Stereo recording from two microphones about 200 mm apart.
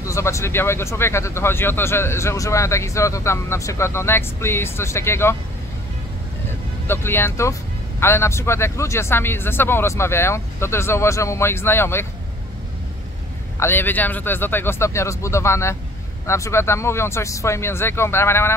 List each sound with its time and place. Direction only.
0.0 s speech: 15° left (ahead or behind)
6.9 s speech: 10° left (ahead or behind)
13.6 s speech: 10° left (ahead or behind)